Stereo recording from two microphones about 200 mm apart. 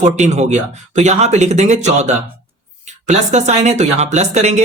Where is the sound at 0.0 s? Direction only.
35° right (ahead or behind).